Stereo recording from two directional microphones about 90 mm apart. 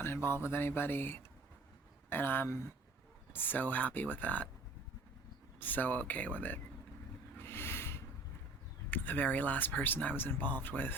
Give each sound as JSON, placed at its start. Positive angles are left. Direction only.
{"t": 0.0, "sound": "speech", "side_deg": 25}
{"t": 5.5, "sound": "speech", "side_deg": 20}
{"t": 7.3, "sound": "a sound", "side_deg": 25}
{"t": 8.9, "sound": "speech", "side_deg": 20}